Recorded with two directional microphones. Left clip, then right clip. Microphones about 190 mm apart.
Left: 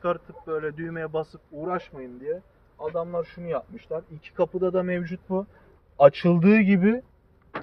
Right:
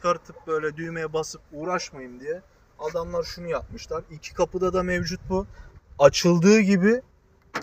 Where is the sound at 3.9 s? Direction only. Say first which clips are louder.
Even; 15° right (ahead or behind).